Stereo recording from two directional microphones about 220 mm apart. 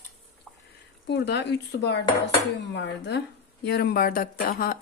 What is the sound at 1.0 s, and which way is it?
Speech, 50° left (ahead or behind).